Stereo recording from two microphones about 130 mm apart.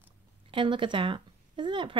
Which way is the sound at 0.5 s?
40° right (ahead or behind).